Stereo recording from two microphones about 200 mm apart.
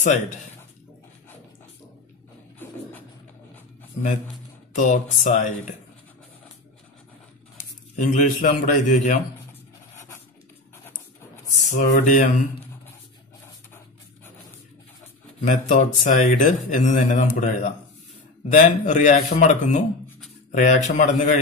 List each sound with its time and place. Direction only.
4.7 s a man's voice: 40° left (ahead or behind)
7.9 s a man's voice: 40° left (ahead or behind)
11.7 s a man's voice: 40° left (ahead or behind)
15.4 s a man's voice: 40° left (ahead or behind)